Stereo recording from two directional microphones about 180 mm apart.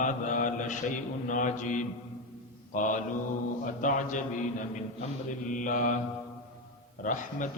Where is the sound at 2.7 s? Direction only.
45° left (ahead or behind).